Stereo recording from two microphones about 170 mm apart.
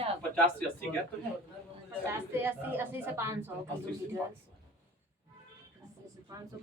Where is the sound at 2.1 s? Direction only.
10° right (ahead or behind).